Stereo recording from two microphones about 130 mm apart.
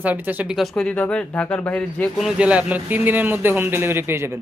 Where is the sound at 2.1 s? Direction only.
5° right (ahead or behind).